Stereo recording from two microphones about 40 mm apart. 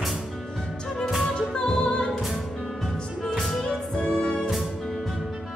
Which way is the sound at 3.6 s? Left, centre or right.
Left.